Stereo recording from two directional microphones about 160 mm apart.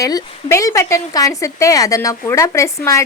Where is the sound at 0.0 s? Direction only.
20° left (ahead or behind).